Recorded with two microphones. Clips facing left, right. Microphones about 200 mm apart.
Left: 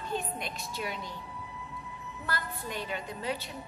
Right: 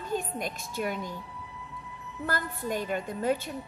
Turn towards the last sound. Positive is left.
turn(degrees=-50)  # may be behind; listen again after turning